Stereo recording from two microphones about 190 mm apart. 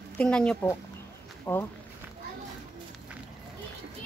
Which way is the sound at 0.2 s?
5° left (ahead or behind).